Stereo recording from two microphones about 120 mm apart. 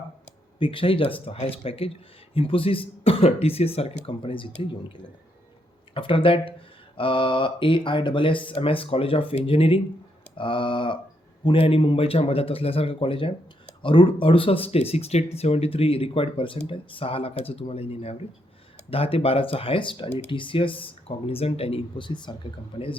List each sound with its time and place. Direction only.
0.6 s speech: 45° left (ahead or behind)
5.9 s speech: 45° left (ahead or behind)